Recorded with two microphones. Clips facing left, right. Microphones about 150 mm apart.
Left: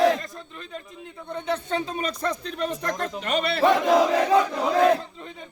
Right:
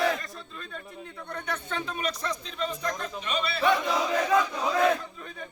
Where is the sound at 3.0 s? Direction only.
65° left (ahead or behind).